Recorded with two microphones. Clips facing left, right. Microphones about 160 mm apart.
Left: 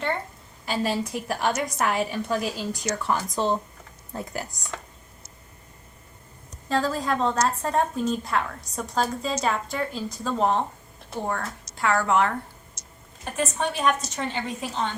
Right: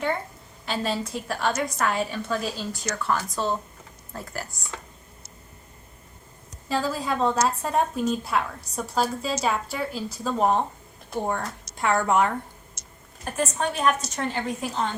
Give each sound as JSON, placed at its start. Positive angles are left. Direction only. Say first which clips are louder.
{"t": 0.6, "sound": "a woman's voice", "louder": "left 2 dB", "side_deg": 5}
{"t": 6.7, "sound": "a woman's voice", "louder": "left 1 dB", "side_deg": -10}
{"t": 13.2, "sound": "a woman's voice", "louder": "even", "side_deg": 0}